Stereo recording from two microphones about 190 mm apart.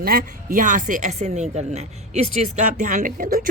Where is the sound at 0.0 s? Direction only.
50° right (ahead or behind).